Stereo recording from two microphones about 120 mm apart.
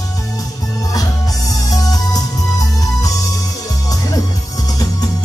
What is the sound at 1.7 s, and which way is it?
Music, 30° left (ahead or behind).